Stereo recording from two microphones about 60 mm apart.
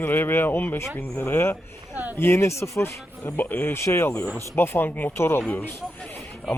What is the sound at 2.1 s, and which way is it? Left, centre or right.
Speech, left.